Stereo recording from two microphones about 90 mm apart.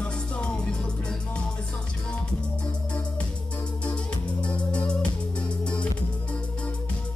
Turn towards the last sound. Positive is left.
turn(degrees=10)  # may be behind; listen again after turning